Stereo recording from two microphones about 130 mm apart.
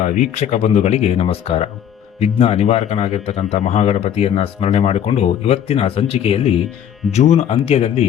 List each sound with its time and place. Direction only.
0.0 s speech: 65° left (ahead or behind)